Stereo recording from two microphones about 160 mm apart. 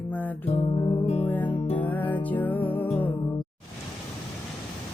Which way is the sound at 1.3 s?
10° left (ahead or behind).